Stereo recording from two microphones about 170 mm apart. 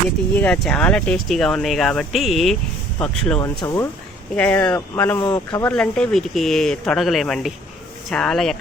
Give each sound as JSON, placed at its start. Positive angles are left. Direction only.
{"t": 0.3, "sound": "speech", "side_deg": 10}
{"t": 3.4, "sound": "speech", "side_deg": 20}
{"t": 4.4, "sound": "speech", "side_deg": 10}
{"t": 5.2, "sound": "speech", "side_deg": 25}
{"t": 5.7, "sound": "speech", "side_deg": 5}